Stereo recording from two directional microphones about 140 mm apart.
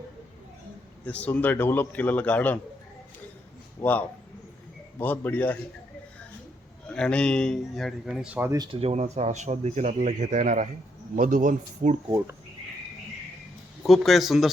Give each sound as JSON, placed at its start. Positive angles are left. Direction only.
{"t": 1.0, "sound": "a man's voice", "side_deg": 10}
{"t": 3.8, "sound": "a man's voice", "side_deg": 15}
{"t": 6.8, "sound": "speech", "side_deg": 5}
{"t": 8.5, "sound": "speech", "side_deg": -30}
{"t": 8.8, "sound": "speech", "side_deg": -50}
{"t": 13.8, "sound": "speech", "side_deg": 0}